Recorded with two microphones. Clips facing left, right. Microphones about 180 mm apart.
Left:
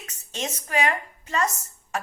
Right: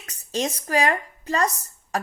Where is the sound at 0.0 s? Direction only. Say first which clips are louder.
Right 6 dB; 35° right (ahead or behind).